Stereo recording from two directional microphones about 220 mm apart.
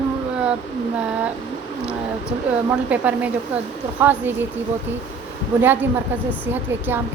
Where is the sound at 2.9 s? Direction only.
5° right (ahead or behind).